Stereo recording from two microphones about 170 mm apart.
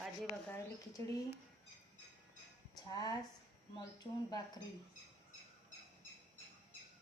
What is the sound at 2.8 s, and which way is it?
Speech, 25° left (ahead or behind).